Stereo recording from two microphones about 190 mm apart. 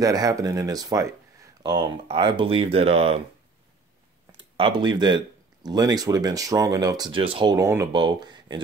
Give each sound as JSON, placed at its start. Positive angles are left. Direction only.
{"t": 0.0, "sound": "speech", "side_deg": -20}
{"t": 4.6, "sound": "speech", "side_deg": -25}